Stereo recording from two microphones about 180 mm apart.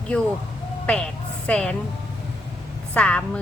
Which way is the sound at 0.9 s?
5° left (ahead or behind).